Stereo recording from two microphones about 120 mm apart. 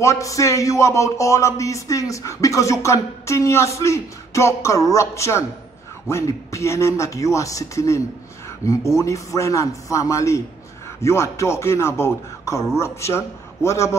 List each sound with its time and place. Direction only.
0.0 s music: 25° left (ahead or behind)